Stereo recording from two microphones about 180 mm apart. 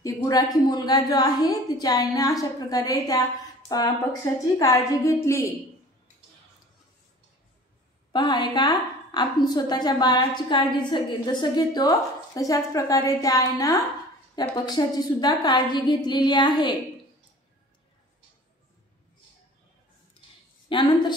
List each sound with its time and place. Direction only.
0.0 s a woman's voice: 20° left (ahead or behind)
8.1 s a woman's voice: 25° left (ahead or behind)
20.6 s a sound: 25° left (ahead or behind)